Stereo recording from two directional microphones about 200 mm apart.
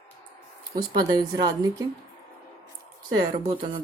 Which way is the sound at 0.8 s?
20° right (ahead or behind).